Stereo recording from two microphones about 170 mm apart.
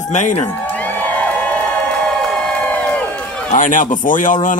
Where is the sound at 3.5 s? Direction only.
50° left (ahead or behind).